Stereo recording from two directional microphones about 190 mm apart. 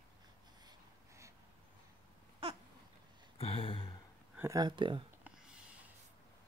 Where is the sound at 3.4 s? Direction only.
30° left (ahead or behind).